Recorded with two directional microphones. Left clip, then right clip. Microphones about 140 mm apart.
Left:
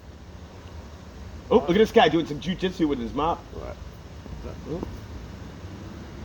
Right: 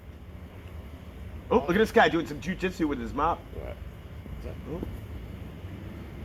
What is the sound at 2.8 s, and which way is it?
Speech, 25° right (ahead or behind).